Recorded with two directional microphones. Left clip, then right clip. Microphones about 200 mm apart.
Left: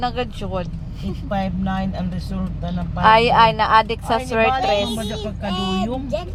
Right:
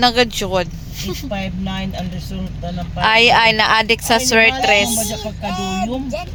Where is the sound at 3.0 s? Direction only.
Centre (ahead or behind).